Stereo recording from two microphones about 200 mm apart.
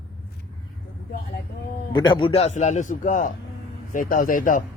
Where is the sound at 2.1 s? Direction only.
25° left (ahead or behind); by 4.6 s 40° left (ahead or behind).